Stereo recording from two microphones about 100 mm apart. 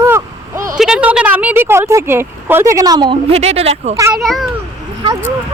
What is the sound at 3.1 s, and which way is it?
Speech, 80° right.